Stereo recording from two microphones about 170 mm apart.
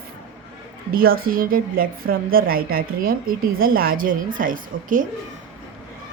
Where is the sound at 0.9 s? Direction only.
60° right (ahead or behind).